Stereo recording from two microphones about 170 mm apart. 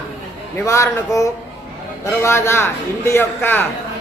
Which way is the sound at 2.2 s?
15° left (ahead or behind).